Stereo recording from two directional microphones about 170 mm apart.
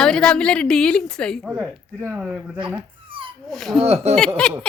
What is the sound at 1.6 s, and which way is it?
Speech, 10° right (ahead or behind).